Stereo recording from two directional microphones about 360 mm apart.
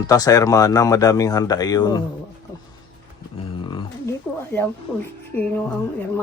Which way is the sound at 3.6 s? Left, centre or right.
Centre.